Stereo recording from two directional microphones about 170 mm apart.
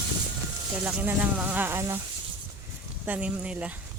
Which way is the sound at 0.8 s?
10° right (ahead or behind).